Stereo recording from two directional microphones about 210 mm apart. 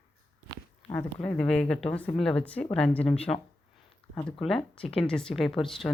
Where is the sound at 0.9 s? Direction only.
5° left (ahead or behind).